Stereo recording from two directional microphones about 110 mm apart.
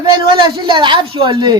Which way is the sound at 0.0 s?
45° right (ahead or behind).